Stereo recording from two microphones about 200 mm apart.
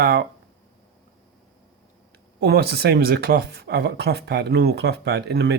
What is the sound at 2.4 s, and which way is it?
Speech, 55° right (ahead or behind).